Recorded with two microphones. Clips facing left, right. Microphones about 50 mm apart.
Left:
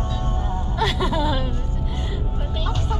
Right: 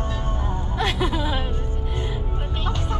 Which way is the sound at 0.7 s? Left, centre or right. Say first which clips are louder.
Left 2 dB; right.